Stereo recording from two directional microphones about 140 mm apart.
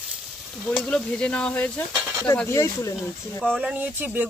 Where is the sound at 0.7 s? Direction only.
5° left (ahead or behind); by 3.4 s 20° left (ahead or behind).